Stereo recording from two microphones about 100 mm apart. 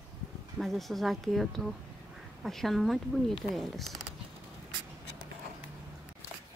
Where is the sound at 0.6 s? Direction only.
Centre (ahead or behind).